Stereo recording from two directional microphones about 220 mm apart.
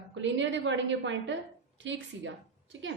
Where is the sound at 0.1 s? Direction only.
55° right (ahead or behind).